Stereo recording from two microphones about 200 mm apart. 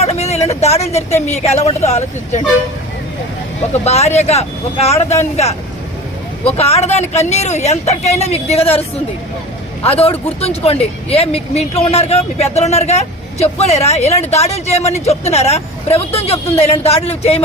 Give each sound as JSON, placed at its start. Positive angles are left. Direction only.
{"t": 0.0, "sound": "speech", "side_deg": 30}
{"t": 3.7, "sound": "speech", "side_deg": 35}
{"t": 9.8, "sound": "speech", "side_deg": 30}